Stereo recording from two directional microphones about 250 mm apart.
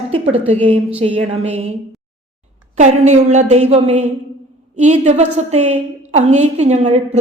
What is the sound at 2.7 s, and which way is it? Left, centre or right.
A woman's voice, right.